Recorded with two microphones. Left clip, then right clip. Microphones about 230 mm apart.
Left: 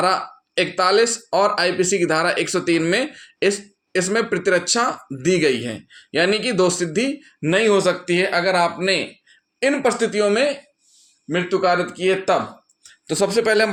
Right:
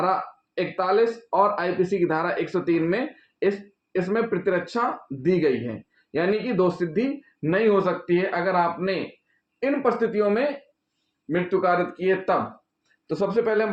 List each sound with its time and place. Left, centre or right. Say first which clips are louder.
0.0 s speech: left 4 dB; left
4.1 s speech: left 5 dB; left